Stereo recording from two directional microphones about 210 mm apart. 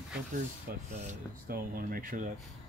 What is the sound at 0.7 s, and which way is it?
Speech, 45° right (ahead or behind).